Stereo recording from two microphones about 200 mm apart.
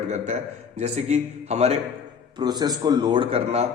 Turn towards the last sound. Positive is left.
turn(degrees=-30)  # may be behind; listen again after turning